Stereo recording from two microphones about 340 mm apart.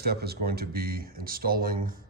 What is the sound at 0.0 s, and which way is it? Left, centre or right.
A man's voice, right.